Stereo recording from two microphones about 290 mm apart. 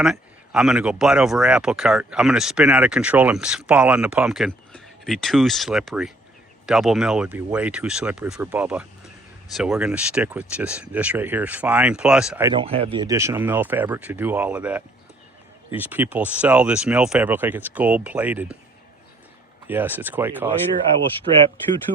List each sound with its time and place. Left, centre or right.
0.0 s speech: centre
12.5 s speech: centre
19.6 s speech: centre
21.9 s speech: right